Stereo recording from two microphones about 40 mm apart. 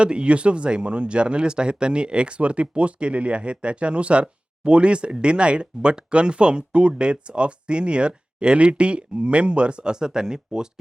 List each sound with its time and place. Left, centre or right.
0.0 s speech: right